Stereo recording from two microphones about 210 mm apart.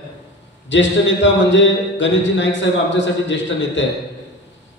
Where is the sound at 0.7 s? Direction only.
60° left (ahead or behind).